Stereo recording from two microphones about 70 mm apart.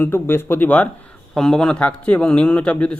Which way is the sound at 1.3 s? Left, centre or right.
Centre.